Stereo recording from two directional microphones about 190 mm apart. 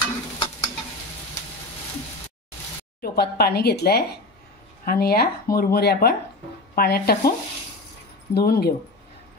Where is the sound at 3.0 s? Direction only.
55° left (ahead or behind).